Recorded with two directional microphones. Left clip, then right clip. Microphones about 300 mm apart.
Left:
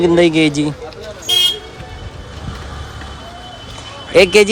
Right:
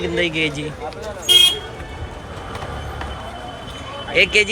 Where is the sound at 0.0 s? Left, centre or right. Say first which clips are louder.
Left 8 dB; centre.